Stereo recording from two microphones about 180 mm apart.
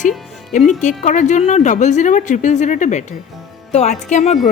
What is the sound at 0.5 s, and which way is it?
A woman's voice, 40° left (ahead or behind).